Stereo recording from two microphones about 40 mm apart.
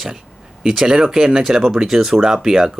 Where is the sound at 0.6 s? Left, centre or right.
Centre.